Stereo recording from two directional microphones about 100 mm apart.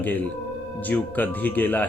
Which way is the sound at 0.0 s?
20° left (ahead or behind).